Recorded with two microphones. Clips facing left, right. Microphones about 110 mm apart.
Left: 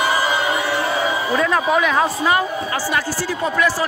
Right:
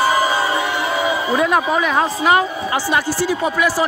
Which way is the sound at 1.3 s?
15° right (ahead or behind).